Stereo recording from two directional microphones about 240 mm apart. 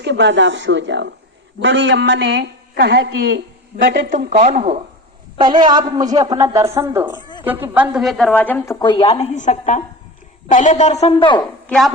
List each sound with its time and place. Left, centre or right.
0.0 s a woman's voice: right; by 7.2 s centre
7.2 s a sound: centre
7.4 s a woman's voice: centre; by 11.4 s left
11.7 s speech: centre